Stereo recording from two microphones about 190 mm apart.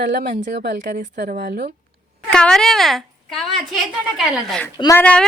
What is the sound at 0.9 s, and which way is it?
Speech, 45° right (ahead or behind).